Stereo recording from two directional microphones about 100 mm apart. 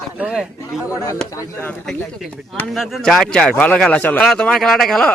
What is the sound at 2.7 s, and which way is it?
A man's voice, centre (ahead or behind).